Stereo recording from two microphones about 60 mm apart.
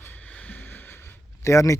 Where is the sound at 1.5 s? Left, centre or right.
Left.